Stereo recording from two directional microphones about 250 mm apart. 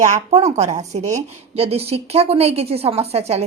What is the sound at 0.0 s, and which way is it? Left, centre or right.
A woman's voice, right.